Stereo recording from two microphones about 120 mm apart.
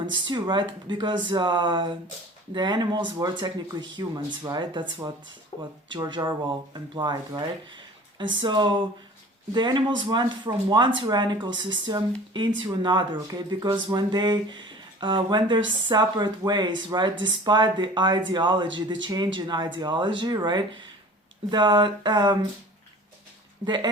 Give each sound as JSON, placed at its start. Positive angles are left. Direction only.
{"t": 0.1, "sound": "speech", "side_deg": -40}
{"t": 23.6, "sound": "speech", "side_deg": -40}